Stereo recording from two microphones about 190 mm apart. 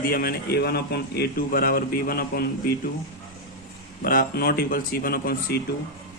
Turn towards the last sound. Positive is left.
turn(degrees=50)  # may be behind; listen again after turning